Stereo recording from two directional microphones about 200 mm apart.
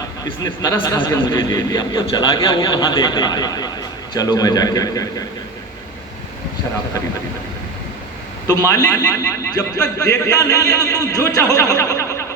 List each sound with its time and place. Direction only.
0.8 s a man's voice: 25° left (ahead or behind)
8.4 s a man's voice: 15° left (ahead or behind)